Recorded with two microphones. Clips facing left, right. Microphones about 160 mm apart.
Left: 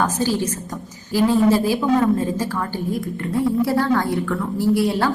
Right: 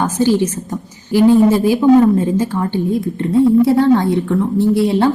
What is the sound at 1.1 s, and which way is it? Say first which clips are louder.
A woman's voice: right 6 dB; 20° right (ahead or behind).